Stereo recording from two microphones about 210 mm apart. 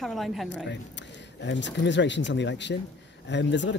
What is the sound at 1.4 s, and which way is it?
Speech, 60° left (ahead or behind).